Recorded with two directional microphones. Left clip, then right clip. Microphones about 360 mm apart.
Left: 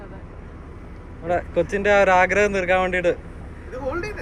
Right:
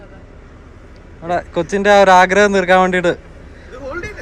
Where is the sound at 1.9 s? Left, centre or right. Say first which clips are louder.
Right 8 dB; right.